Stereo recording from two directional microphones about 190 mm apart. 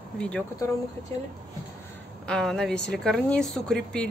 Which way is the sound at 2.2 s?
5° left (ahead or behind).